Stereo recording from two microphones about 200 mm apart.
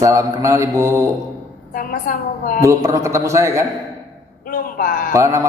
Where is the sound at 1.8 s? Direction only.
45° left (ahead or behind).